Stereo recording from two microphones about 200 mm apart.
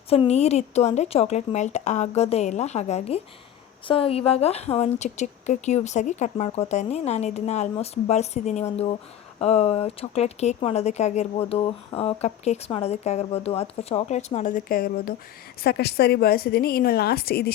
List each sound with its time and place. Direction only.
0.1 s a woman's voice: 30° left (ahead or behind); by 17.5 s 50° left (ahead or behind)